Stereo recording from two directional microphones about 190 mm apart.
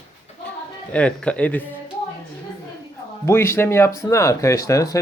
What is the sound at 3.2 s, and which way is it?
Speech, 15° left (ahead or behind).